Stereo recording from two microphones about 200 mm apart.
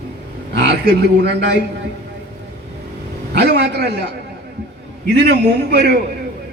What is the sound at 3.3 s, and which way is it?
Speech, 55° right (ahead or behind).